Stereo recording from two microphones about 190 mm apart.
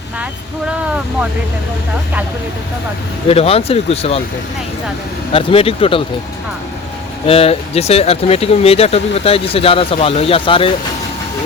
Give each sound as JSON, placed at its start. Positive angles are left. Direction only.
{"t": 3.2, "sound": "speech", "side_deg": 30}
{"t": 5.3, "sound": "speech", "side_deg": 30}
{"t": 7.3, "sound": "speech", "side_deg": 30}